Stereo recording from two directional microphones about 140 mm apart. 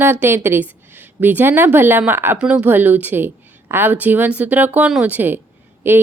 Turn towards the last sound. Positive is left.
turn(degrees=-15)  # may be behind; listen again after turning